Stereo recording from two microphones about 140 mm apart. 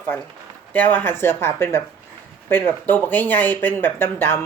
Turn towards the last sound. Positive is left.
turn(degrees=15)  # may be behind; listen again after turning